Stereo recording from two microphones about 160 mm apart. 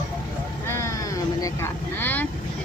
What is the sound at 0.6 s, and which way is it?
Speech, 15° left (ahead or behind).